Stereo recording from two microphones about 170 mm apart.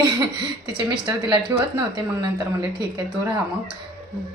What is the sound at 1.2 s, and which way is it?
Speech, 25° right (ahead or behind).